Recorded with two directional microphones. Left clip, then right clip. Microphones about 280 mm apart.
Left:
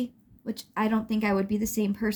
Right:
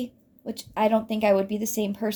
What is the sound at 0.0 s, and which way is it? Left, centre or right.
Speech, left.